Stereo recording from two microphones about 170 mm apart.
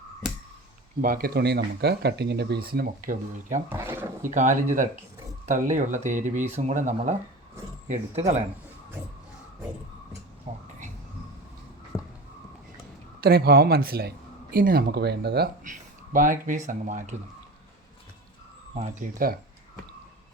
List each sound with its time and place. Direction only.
1.0 s speech: 60° right (ahead or behind)
3.7 s speech: 15° right (ahead or behind)
4.2 s a man's voice: 50° right (ahead or behind)
10.5 s a sound: 35° right (ahead or behind)
11.9 s a sound: 15° left (ahead or behind)
13.2 s speech: 65° right (ahead or behind)
15.6 s speech: 50° right (ahead or behind)
18.7 s a man's voice: 40° right (ahead or behind)